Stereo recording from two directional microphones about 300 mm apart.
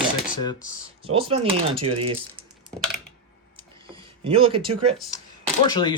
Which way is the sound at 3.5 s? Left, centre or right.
Centre.